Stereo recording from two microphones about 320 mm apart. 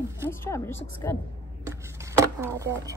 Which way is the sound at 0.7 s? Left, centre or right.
Left.